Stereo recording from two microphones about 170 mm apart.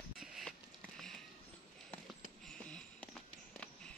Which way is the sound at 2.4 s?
5° left (ahead or behind).